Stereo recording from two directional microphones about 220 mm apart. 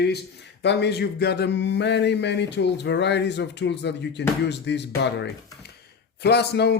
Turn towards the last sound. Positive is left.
turn(degrees=50)  # may be behind; listen again after turning